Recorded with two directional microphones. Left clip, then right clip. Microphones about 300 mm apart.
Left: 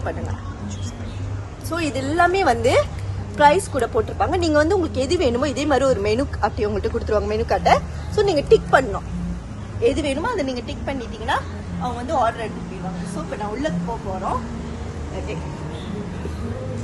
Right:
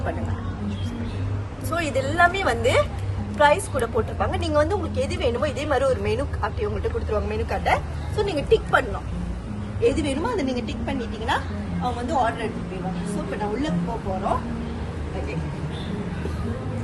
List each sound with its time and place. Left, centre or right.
1.7 s a woman's voice: left
9.8 s a woman's voice: centre